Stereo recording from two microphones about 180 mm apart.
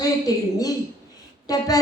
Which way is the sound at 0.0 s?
20° left (ahead or behind).